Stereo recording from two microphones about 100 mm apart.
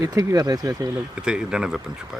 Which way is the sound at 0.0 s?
35° right (ahead or behind).